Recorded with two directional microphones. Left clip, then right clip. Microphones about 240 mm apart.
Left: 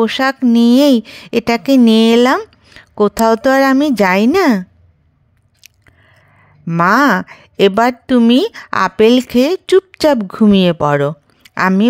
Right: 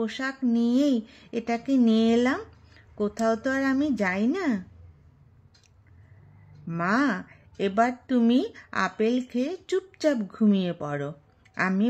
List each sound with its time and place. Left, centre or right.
0.0 s a woman's voice: left
6.7 s a woman's voice: left